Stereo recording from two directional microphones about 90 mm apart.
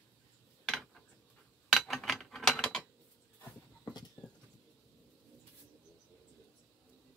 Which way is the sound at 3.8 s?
50° left (ahead or behind).